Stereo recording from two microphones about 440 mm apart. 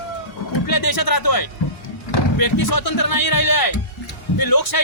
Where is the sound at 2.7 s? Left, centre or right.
Left.